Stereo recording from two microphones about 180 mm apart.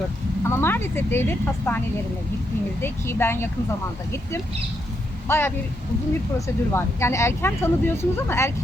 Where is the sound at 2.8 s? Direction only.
15° left (ahead or behind).